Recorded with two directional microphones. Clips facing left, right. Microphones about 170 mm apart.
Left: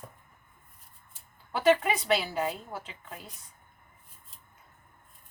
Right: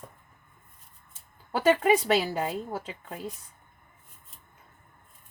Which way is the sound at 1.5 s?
45° right (ahead or behind).